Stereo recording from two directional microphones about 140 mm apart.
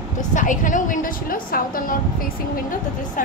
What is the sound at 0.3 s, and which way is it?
A woman's voice, 65° left (ahead or behind).